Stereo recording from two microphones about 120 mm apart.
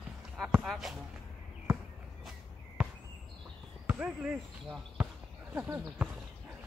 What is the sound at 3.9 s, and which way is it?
Speech, 10° right (ahead or behind).